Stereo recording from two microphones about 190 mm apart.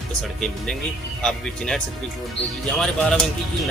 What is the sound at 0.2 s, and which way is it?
A man's voice, centre (ahead or behind).